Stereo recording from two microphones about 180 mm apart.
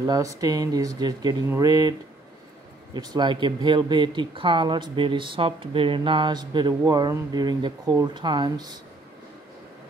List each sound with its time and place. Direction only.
0.0 s speech: 20° right (ahead or behind)